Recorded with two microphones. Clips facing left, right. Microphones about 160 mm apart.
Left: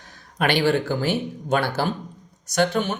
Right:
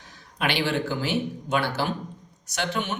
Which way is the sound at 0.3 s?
45° left (ahead or behind).